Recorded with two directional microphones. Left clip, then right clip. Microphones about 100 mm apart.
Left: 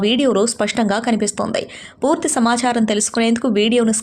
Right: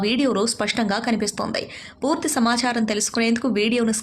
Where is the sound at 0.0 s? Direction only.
45° left (ahead or behind).